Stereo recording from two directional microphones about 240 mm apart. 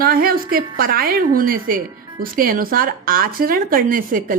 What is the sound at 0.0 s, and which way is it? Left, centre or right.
A woman's voice, right.